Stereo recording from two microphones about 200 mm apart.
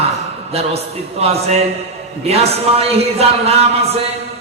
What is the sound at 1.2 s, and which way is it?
Speech, 30° right (ahead or behind).